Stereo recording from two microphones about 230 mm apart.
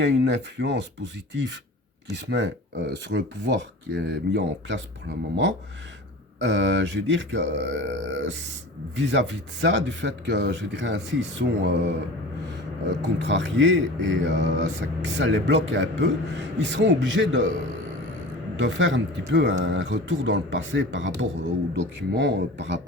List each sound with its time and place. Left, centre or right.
0.0 s speech: right
12.9 s speech: right
18.5 s speech: right